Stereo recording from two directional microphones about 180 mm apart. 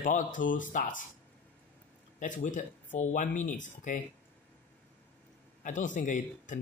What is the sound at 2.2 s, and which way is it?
Speech, 45° left (ahead or behind).